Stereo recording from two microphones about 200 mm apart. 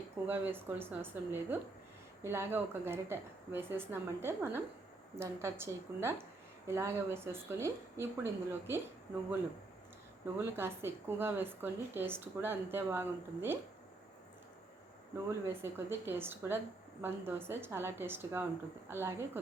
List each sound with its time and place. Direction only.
0.3 s a woman's voice: 10° right (ahead or behind)
10.3 s a woman's voice: 10° right (ahead or behind)
15.4 s a woman's voice: 10° right (ahead or behind)